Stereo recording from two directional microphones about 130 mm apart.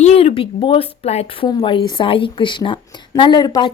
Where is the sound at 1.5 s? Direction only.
35° left (ahead or behind).